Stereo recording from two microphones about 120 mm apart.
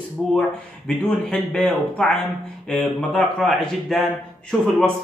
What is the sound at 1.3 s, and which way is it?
A man's voice, 10° left (ahead or behind).